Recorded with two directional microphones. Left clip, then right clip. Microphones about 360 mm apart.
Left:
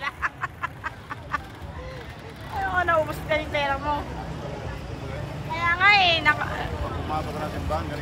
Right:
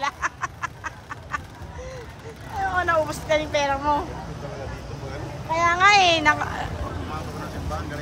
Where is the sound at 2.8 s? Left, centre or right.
Centre.